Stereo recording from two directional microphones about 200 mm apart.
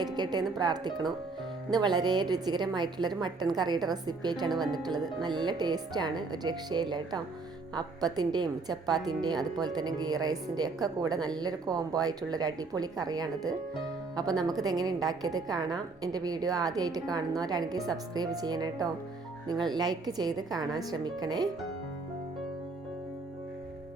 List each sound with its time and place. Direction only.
0.0 s a woman's voice: 20° right (ahead or behind)